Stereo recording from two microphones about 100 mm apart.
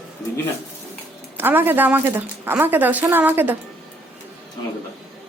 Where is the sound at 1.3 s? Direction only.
20° right (ahead or behind).